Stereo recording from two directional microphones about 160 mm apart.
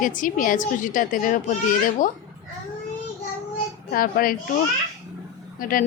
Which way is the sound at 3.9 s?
65° left (ahead or behind).